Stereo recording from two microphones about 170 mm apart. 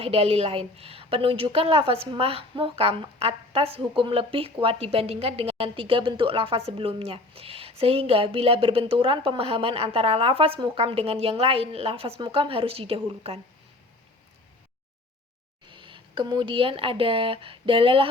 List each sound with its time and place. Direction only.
0.0 s a woman's voice: 35° right (ahead or behind)
15.7 s speech: 30° right (ahead or behind)